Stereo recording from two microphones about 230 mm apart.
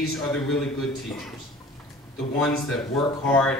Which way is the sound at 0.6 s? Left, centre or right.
Centre.